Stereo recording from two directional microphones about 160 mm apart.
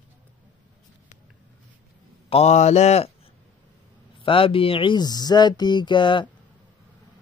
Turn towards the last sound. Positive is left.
turn(degrees=30)  # may be behind; listen again after turning